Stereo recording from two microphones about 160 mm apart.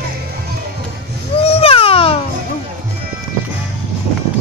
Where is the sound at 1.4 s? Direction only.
40° left (ahead or behind).